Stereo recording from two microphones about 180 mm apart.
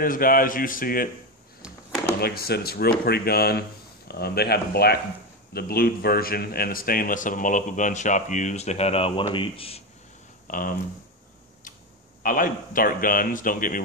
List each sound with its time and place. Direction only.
0.0 s a man's voice: 50° left (ahead or behind)
2.1 s a man's voice: 60° left (ahead or behind); by 9.8 s 30° left (ahead or behind)
10.4 s speech: 50° left (ahead or behind)
12.2 s a man's voice: 50° left (ahead or behind)